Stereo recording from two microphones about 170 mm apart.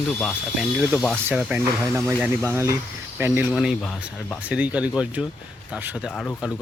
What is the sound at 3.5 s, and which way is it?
Speech, centre (ahead or behind).